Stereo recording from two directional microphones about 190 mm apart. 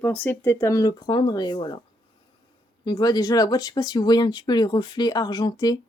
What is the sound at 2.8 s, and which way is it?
Speech, 20° left (ahead or behind).